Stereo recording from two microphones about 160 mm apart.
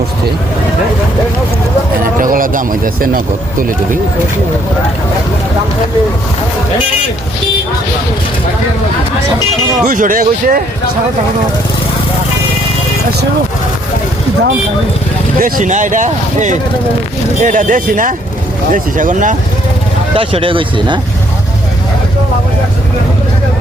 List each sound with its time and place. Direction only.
2.1 s speech: 60° right (ahead or behind)
9.8 s speech: 60° right (ahead or behind)
15.4 s speech: 60° right (ahead or behind)
20.1 s speech: 35° right (ahead or behind)